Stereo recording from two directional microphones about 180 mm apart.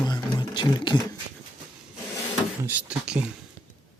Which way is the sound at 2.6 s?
10° right (ahead or behind).